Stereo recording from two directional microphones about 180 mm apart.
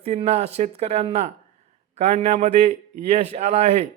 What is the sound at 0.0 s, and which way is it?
Speech, 35° right (ahead or behind).